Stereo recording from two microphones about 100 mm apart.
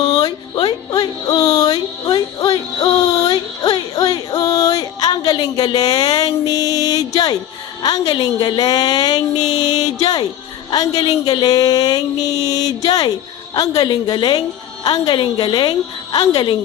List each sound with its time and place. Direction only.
0.2 s music: 45° left (ahead or behind)
7.8 s speech: 45° left (ahead or behind)
10.7 s a sound: 40° left (ahead or behind)
13.6 s speech: 40° left (ahead or behind)